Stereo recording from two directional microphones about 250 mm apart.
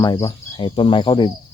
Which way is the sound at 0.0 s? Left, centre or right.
Centre.